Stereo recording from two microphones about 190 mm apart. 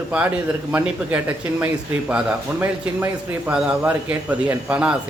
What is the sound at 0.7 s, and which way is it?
A man's voice, 10° right (ahead or behind).